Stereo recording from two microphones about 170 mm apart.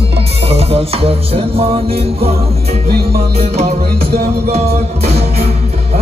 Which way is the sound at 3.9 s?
65° right (ahead or behind).